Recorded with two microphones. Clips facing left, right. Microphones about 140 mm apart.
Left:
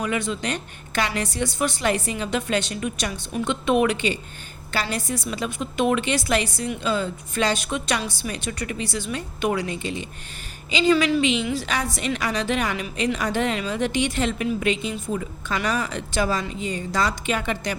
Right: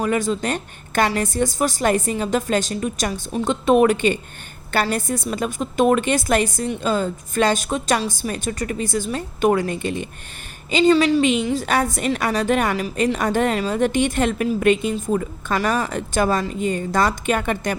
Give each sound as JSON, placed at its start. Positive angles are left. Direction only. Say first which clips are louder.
{"t": 0.0, "sound": "a woman's voice", "louder": "right 5 dB", "side_deg": -40}
{"t": 10.8, "sound": "a woman's voice", "louder": "right 4 dB", "side_deg": -30}
{"t": 11.2, "sound": "a woman's voice", "louder": "right 4 dB", "side_deg": -50}